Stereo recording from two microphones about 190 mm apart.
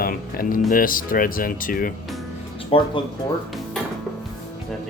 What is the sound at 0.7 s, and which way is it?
Speech, 45° left (ahead or behind).